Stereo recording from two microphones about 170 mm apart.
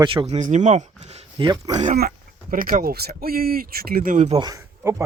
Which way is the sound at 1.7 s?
40° right (ahead or behind).